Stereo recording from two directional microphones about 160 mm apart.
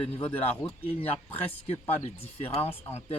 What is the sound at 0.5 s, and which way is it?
Speech, 10° left (ahead or behind).